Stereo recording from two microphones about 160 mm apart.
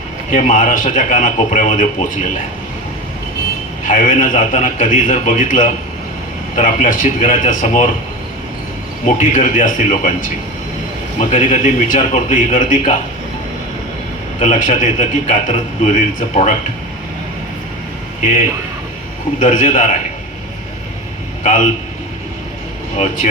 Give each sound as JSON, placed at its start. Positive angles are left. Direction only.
{"t": 0.3, "sound": "a man's voice", "side_deg": 55}
{"t": 3.8, "sound": "a man's voice", "side_deg": 55}
{"t": 9.3, "sound": "a man's voice", "side_deg": 55}
{"t": 11.2, "sound": "a man's voice", "side_deg": 50}
{"t": 14.3, "sound": "a man's voice", "side_deg": 50}
{"t": 19.4, "sound": "a man's voice", "side_deg": 50}
{"t": 21.4, "sound": "a man's voice", "side_deg": 50}